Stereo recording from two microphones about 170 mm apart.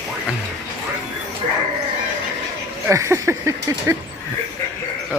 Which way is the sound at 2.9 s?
15° right (ahead or behind).